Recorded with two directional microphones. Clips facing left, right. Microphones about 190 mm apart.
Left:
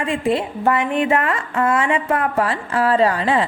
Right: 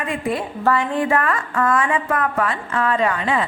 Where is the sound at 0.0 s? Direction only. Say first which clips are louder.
Left 4 dB; 25° left (ahead or behind).